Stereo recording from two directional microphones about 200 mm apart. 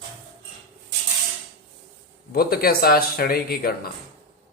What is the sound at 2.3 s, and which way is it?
Speech, 50° left (ahead or behind).